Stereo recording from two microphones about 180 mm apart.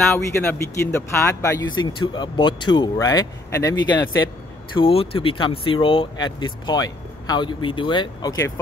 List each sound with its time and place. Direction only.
0.1 s speech: 15° left (ahead or behind)